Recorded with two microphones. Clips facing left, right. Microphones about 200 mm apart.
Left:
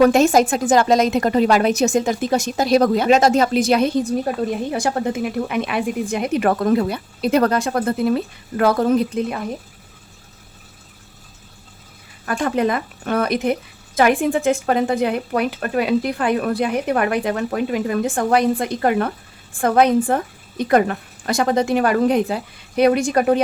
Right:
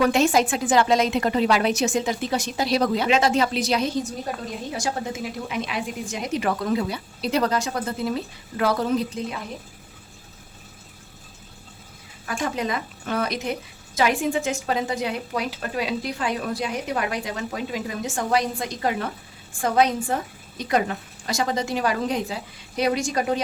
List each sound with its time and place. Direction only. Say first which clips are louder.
0.0 s a woman's voice: left 6 dB; 45° left (ahead or behind)
12.2 s speech: left 7 dB; 55° left (ahead or behind)